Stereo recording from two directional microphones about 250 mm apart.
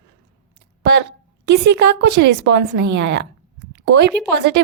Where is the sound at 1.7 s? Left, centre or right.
Right.